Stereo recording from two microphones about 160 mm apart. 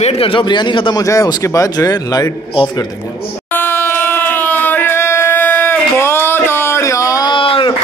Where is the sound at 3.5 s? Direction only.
15° left (ahead or behind).